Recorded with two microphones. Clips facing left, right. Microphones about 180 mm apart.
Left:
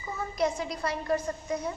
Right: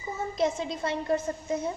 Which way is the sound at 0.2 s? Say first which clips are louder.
Right 1 dB; 25° right (ahead or behind).